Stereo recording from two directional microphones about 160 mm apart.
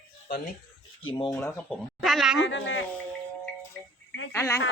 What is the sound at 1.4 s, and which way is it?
Speech, 15° left (ahead or behind).